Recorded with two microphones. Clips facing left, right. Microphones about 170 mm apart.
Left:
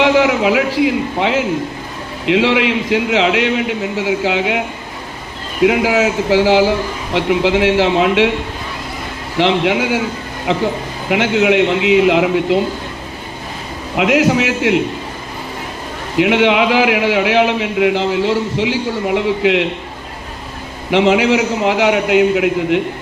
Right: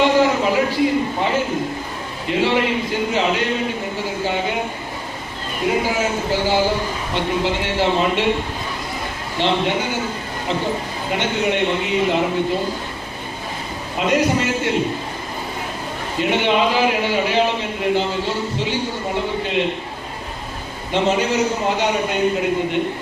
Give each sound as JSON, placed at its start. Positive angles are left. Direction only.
{"t": 0.0, "sound": "a man's voice", "side_deg": 90}
{"t": 5.6, "sound": "a man's voice", "side_deg": 90}
{"t": 9.4, "sound": "a man's voice", "side_deg": 90}
{"t": 13.9, "sound": "a man's voice", "side_deg": 90}
{"t": 16.1, "sound": "a man's voice", "side_deg": 90}
{"t": 20.9, "sound": "a man's voice", "side_deg": 90}